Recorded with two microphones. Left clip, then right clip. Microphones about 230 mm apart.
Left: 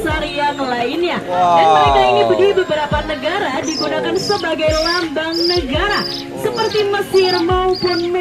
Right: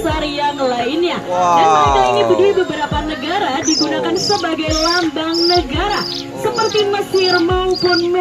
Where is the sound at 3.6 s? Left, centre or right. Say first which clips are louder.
Right 2 dB; centre.